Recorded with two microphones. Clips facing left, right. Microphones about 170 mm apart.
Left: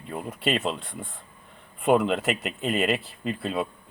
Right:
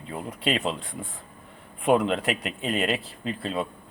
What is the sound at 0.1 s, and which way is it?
Speech, 5° left (ahead or behind).